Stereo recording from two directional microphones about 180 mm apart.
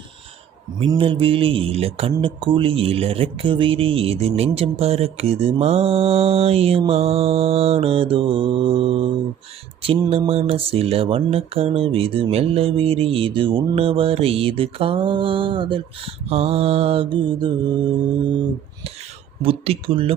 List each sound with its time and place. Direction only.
0.8 s speech: 30° right (ahead or behind)
19.4 s speech: 30° right (ahead or behind)